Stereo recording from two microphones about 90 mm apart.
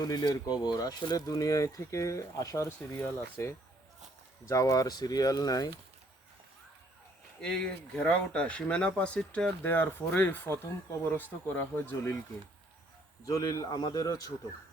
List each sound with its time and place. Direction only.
0.0 s speech: 45° left (ahead or behind)
2.6 s speech: 25° left (ahead or behind); by 5.7 s 45° left (ahead or behind)
7.4 s speech: 10° left (ahead or behind)
13.2 s speech: 45° left (ahead or behind)